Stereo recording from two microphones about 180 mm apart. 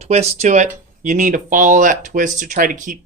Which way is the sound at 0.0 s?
35° right (ahead or behind).